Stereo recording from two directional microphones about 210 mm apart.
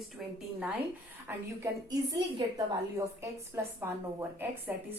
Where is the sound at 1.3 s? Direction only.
15° right (ahead or behind).